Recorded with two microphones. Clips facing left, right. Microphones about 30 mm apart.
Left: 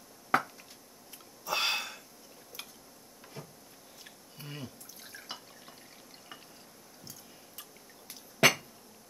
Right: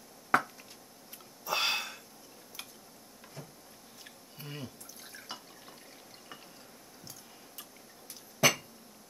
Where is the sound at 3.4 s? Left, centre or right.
Left.